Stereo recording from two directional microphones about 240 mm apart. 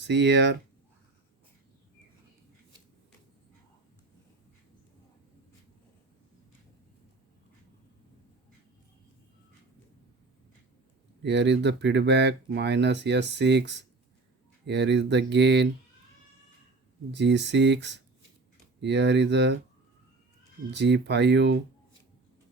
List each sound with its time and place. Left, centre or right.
0.1 s speech: right
11.2 s speech: right
17.1 s speech: right
20.7 s speech: right